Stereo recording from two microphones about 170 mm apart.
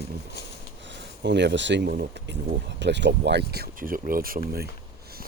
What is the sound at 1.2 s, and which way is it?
Speech, 90° right.